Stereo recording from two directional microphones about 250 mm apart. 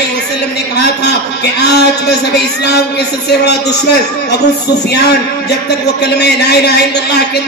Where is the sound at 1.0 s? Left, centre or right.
Left.